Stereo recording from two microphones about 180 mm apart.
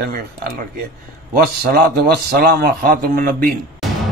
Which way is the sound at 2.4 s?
55° right (ahead or behind).